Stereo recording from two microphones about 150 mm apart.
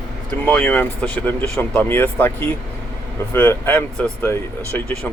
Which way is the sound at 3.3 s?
15° left (ahead or behind).